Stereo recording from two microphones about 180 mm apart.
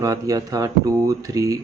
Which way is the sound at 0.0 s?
20° right (ahead or behind).